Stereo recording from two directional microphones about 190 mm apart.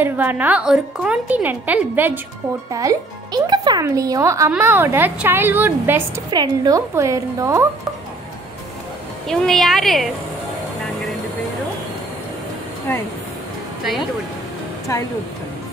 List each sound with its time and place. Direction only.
0.0 s a woman's voice: 10° right (ahead or behind)
6.3 s a woman's voice: 20° right (ahead or behind)
9.3 s a woman's voice: centre (ahead or behind)
14.9 s speech: 15° left (ahead or behind)